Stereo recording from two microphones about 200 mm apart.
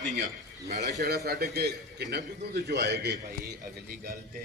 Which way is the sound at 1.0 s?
50° right (ahead or behind).